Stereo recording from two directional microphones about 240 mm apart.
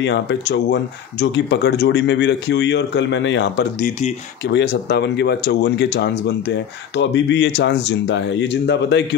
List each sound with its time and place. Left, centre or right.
0.0 s speech: left